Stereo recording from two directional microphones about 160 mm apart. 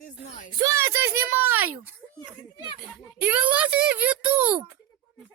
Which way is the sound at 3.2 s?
10° right (ahead or behind).